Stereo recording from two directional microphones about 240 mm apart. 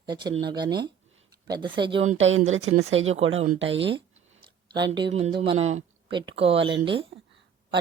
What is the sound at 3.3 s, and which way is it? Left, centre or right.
Speech, right.